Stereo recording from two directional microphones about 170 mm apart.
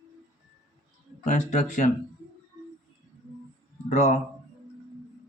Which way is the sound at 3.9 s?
45° left (ahead or behind).